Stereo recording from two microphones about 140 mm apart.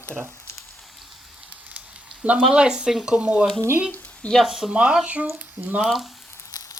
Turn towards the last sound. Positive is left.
turn(degrees=25)  # may be behind; listen again after turning